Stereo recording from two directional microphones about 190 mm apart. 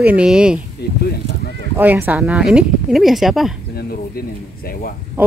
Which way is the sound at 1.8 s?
10° right (ahead or behind).